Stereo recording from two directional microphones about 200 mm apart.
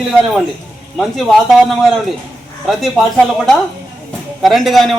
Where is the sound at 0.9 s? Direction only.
Centre (ahead or behind).